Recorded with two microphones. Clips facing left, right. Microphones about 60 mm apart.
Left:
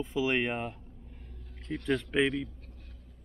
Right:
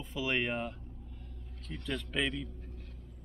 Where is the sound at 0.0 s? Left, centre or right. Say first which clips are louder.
Left 5 dB; centre.